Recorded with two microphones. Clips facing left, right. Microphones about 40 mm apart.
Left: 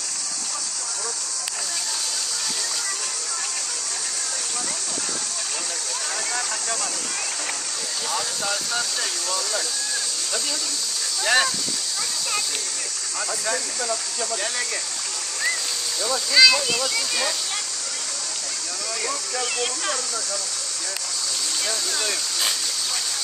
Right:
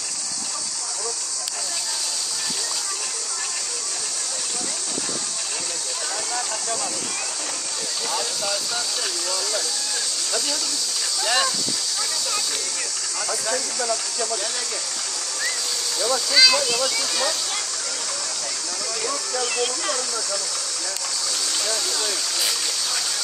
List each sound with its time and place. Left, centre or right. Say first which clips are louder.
11.2 s speech: left 3 dB; centre
16.0 s speech: left 1 dB; centre
19.0 s speech: right 2 dB; centre